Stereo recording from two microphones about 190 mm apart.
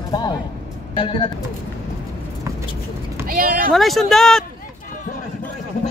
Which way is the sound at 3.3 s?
45° right (ahead or behind).